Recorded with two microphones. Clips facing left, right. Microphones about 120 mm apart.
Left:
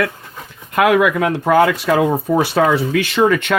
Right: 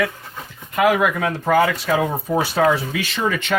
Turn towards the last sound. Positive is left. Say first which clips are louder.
# left 6 dB
turn(degrees=65)  # may be behind; listen again after turning